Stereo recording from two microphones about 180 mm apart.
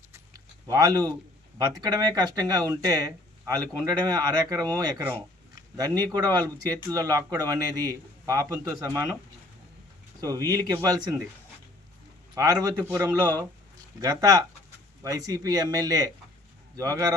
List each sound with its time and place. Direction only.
0.7 s speech: 20° right (ahead or behind)
10.2 s speech: 20° right (ahead or behind)
12.3 s a man's voice: 20° right (ahead or behind)